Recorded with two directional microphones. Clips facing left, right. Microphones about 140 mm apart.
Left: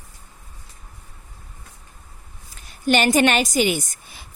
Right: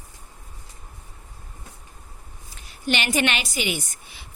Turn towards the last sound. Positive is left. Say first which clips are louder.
# left 5 dB
turn(degrees=45)  # may be behind; listen again after turning